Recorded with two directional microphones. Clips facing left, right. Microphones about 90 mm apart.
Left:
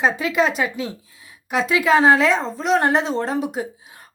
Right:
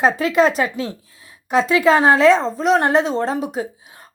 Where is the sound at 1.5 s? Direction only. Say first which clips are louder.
Right 3 dB; 35° right (ahead or behind).